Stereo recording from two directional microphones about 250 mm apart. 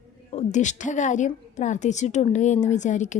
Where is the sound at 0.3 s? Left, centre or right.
Left.